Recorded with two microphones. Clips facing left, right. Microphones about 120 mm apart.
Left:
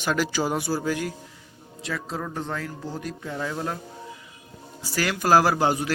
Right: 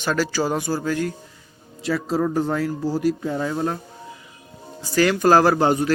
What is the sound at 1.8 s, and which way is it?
Speech, 5° right (ahead or behind).